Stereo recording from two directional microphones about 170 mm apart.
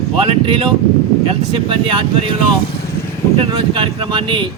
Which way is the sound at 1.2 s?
30° right (ahead or behind).